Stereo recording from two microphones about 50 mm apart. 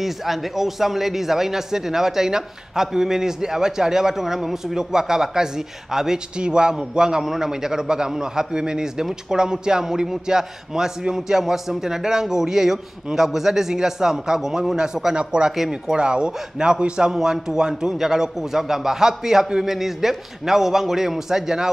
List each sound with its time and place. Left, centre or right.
0.0 s speech: centre
15.1 s speech: centre
15.5 s speech: centre
16.0 s speech: centre